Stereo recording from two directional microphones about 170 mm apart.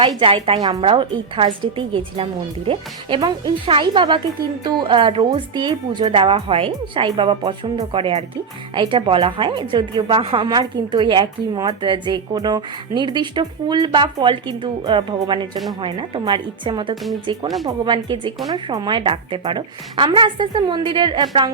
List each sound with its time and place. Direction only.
0.2 s a woman's voice: 30° right (ahead or behind)
16.9 s speech: centre (ahead or behind)
17.7 s a woman's voice: 25° right (ahead or behind)